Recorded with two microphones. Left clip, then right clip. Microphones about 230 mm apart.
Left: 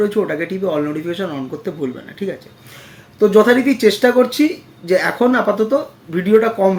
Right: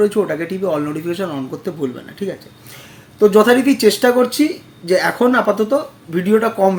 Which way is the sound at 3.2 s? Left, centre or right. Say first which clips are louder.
Even; centre.